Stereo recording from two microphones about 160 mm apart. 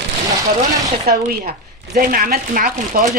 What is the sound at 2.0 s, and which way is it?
Speech, 60° right (ahead or behind).